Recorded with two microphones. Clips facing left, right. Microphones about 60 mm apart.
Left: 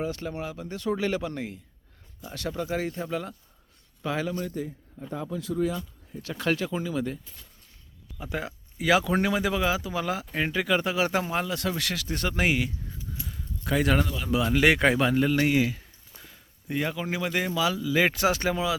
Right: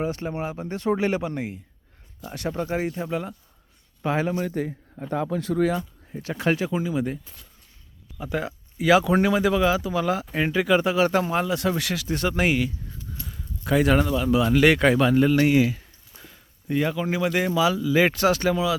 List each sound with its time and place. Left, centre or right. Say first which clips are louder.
0.0 s speech: right 4 dB; right
4.0 s speech: right 5 dB; right
4.4 s speech: right 5 dB; right
5.7 s speech: right 6 dB; right
6.3 s speech: right 4 dB; right
8.2 s speech: right 5 dB; centre
10.9 s speech: right 5 dB; centre
11.4 s speech: right 5 dB; centre
11.8 s speech: right 4 dB; centre
12.6 s a sound: right 4 dB; centre
13.2 s speech: right 5 dB; centre
15.1 s a man's voice: right 5 dB; centre
18.1 s speech: right 4 dB; centre
18.3 s speech: right 4 dB; left